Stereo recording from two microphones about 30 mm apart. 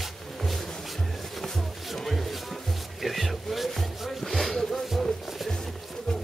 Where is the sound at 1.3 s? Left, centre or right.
Centre.